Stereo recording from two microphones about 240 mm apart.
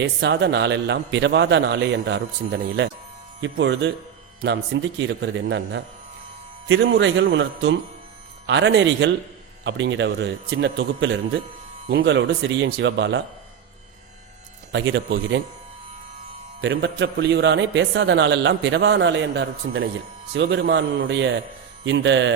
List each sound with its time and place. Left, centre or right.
0.0 s a man's voice: right
14.7 s a man's voice: right
16.6 s a man's voice: right